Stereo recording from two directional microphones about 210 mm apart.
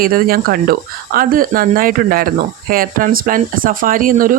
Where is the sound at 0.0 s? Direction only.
45° right (ahead or behind).